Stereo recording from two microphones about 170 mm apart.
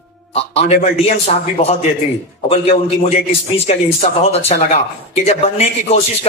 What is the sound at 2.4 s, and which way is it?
A man's voice, 35° left (ahead or behind).